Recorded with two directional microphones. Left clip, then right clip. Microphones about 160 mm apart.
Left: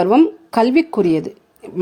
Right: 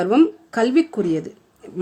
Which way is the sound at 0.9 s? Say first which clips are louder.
Left 6 dB; 15° left (ahead or behind).